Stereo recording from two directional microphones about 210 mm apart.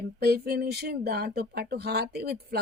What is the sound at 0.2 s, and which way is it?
Speech, 50° right (ahead or behind).